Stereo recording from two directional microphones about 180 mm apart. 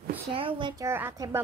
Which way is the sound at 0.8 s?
15° right (ahead or behind).